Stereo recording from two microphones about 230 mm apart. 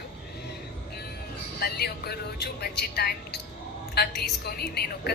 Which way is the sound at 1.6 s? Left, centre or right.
Left.